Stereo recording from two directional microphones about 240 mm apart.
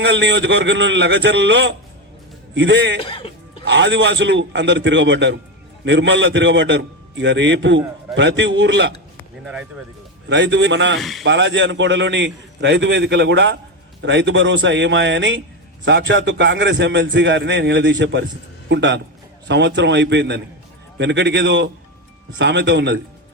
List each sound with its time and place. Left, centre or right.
0.0 s a man's voice: right
3.0 s speech: left
3.7 s a man's voice: right
10.2 s a man's voice: right